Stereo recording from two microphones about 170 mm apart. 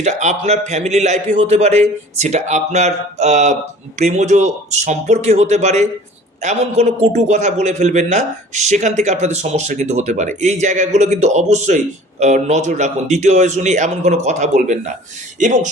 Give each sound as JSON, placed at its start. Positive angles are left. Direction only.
{"t": 0.0, "sound": "a man's voice", "side_deg": -40}